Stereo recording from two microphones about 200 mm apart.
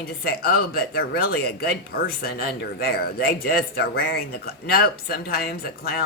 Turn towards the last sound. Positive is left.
turn(degrees=50)  # may be behind; listen again after turning